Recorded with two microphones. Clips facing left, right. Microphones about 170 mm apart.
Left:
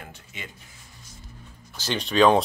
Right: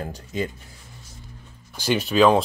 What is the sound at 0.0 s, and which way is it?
Speech, 40° right (ahead or behind).